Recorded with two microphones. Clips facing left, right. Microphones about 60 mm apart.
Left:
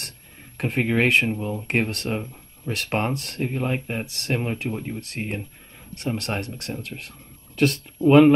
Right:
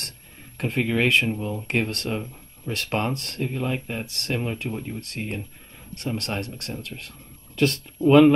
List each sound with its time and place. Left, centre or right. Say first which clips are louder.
0.6 s speech: left 1 dB; left